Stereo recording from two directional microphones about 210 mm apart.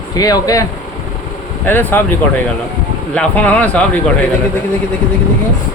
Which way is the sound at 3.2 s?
5° left (ahead or behind).